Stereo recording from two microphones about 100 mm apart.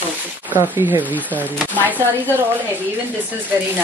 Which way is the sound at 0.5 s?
20° right (ahead or behind).